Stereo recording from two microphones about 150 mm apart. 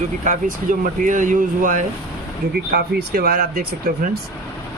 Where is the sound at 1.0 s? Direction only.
60° right (ahead or behind).